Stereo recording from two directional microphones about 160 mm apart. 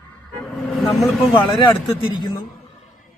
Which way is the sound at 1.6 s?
30° left (ahead or behind).